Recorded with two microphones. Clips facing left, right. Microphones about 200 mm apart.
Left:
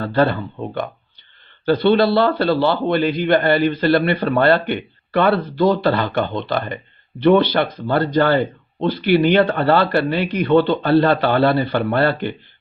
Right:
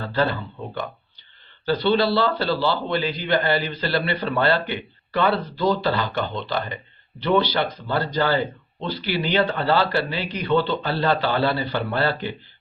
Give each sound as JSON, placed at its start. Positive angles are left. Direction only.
{"t": 0.0, "sound": "a man's voice", "side_deg": 55}